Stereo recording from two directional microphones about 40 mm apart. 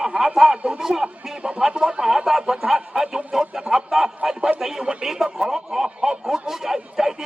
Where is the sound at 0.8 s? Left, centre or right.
Centre.